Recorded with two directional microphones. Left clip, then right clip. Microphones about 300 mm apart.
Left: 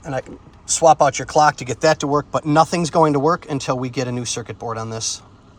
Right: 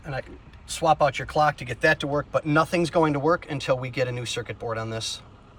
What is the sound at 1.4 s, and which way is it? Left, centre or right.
Speech, centre.